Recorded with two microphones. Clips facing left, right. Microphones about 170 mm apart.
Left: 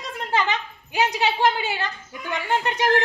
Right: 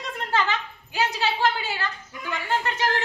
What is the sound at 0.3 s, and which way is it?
A child's voice, 15° left (ahead or behind).